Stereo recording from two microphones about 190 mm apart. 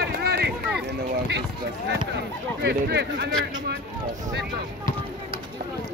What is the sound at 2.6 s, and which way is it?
Speech, 60° right (ahead or behind).